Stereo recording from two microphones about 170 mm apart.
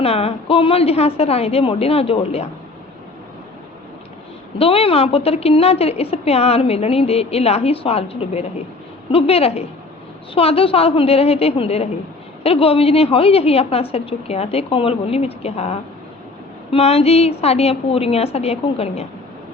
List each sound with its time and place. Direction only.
0.0 s a woman's voice: 35° left (ahead or behind)
4.5 s a woman's voice: 35° left (ahead or behind)